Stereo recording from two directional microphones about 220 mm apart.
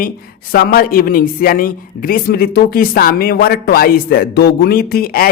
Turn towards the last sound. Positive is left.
turn(degrees=40)  # may be behind; listen again after turning